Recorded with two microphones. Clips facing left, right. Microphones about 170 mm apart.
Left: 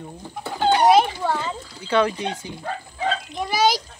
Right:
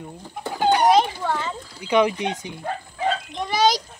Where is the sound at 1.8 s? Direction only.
15° right (ahead or behind).